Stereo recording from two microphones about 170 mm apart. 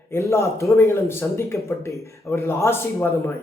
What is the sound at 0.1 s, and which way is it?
Speech, 15° left (ahead or behind).